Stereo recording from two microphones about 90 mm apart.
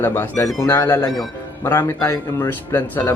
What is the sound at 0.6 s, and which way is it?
Speech, 35° left (ahead or behind).